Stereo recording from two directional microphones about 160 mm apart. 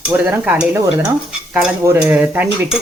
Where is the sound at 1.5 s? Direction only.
5° right (ahead or behind).